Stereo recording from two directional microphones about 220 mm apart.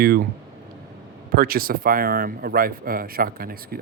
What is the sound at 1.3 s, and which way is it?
A man's voice, 40° right (ahead or behind).